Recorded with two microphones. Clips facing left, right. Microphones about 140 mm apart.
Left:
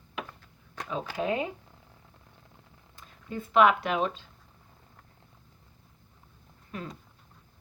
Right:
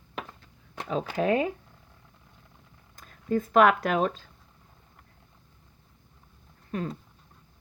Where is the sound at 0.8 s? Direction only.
35° right (ahead or behind).